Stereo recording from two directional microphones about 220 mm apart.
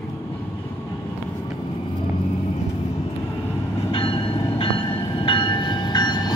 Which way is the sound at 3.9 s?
25° left (ahead or behind).